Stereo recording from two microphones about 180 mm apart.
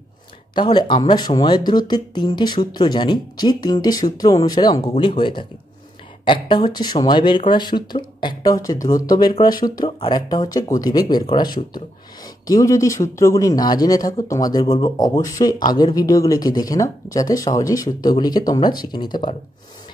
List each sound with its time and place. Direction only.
0.6 s speech: 25° left (ahead or behind)